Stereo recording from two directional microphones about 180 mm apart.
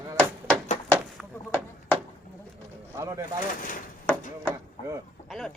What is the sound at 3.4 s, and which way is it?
Speech, 50° left (ahead or behind).